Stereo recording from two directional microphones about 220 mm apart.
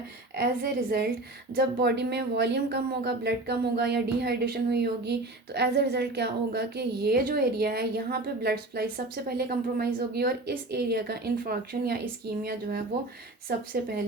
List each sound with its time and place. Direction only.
0.3 s speech: 45° right (ahead or behind)